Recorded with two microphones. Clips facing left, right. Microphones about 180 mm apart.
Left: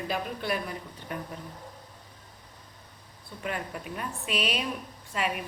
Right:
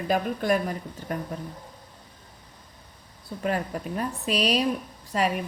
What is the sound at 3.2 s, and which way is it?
A woman's voice, 40° right (ahead or behind).